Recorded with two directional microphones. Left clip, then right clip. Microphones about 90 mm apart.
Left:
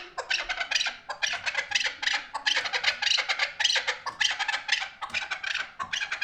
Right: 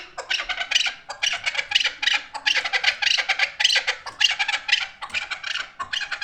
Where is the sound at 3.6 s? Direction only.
20° left (ahead or behind).